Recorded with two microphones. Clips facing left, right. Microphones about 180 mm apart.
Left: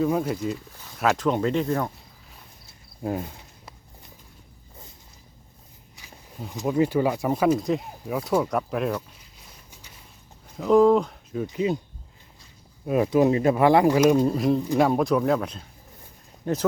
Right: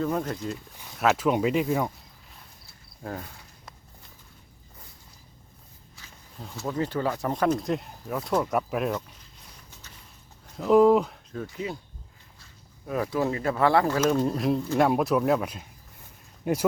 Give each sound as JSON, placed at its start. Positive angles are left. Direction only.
{"t": 0.0, "sound": "speech", "side_deg": 5}
{"t": 3.0, "sound": "speech", "side_deg": 20}
{"t": 6.0, "sound": "a sound", "side_deg": 15}
{"t": 6.5, "sound": "speech", "side_deg": 15}
{"t": 10.6, "sound": "speech", "side_deg": -5}
{"t": 11.3, "sound": "speech", "side_deg": 15}
{"t": 14.3, "sound": "speech", "side_deg": 0}